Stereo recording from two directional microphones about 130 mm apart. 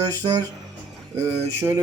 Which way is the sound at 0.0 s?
30° right (ahead or behind).